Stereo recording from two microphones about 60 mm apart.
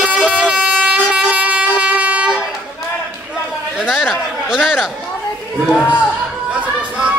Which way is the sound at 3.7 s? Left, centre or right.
Centre.